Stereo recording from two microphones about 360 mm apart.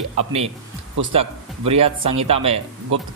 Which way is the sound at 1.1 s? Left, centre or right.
Centre.